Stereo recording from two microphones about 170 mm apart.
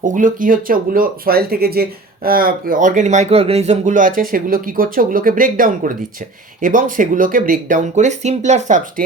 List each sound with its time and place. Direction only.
0.0 s speech: 50° right (ahead or behind)